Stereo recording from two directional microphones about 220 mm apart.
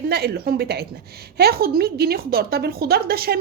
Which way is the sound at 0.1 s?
45° right (ahead or behind).